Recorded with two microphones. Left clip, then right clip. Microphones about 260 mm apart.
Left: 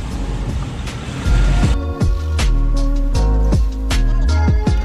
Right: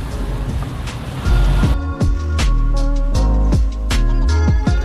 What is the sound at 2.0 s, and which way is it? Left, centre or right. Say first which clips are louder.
Music: even; centre.